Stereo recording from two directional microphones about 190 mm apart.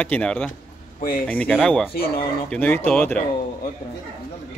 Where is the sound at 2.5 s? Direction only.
10° left (ahead or behind).